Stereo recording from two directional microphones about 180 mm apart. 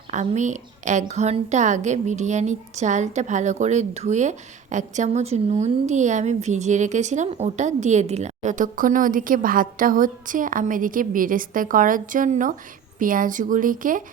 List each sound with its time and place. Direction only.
0.1 s a woman's voice: 40° right (ahead or behind)